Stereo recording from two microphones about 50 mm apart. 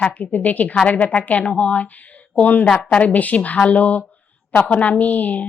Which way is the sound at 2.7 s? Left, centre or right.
Centre.